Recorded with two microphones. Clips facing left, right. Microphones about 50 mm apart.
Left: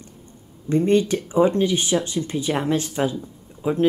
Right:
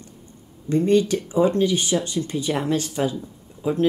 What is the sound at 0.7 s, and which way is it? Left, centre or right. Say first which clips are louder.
Speech: even; left.